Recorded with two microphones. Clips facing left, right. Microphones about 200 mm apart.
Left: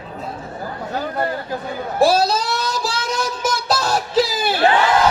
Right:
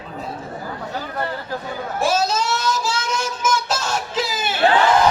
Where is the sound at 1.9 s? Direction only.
35° left (ahead or behind).